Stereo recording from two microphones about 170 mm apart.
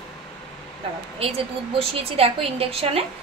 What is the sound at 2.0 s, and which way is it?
A woman's voice, 35° right (ahead or behind).